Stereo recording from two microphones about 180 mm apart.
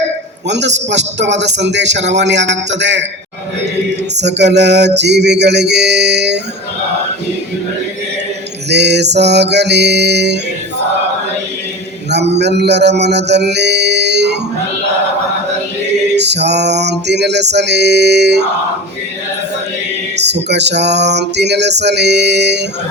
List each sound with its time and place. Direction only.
0.4 s a man's voice: 75° right (ahead or behind)
4.2 s a man's voice: 70° right (ahead or behind)
8.7 s a man's voice: 70° right (ahead or behind)
12.3 s music: 70° right (ahead or behind)
16.1 s a man's voice: 70° right (ahead or behind)
20.1 s a man's voice: 70° right (ahead or behind)